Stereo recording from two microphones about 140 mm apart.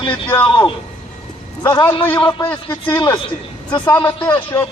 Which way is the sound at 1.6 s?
30° left (ahead or behind).